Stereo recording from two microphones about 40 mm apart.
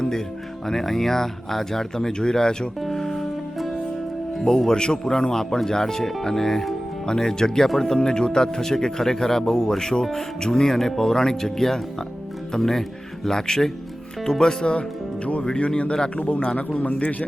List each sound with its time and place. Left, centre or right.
0.7 s speech: centre
2.8 s music: centre
4.4 s speech: centre; by 17.2 s left